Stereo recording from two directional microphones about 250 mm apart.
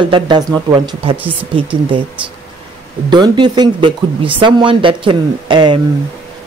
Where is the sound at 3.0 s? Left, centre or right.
Centre.